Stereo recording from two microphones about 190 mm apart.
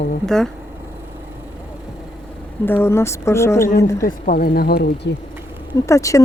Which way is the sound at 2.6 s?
10° left (ahead or behind).